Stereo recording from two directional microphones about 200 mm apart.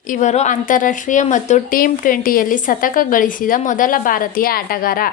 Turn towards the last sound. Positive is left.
turn(degrees=45)  # may be behind; listen again after turning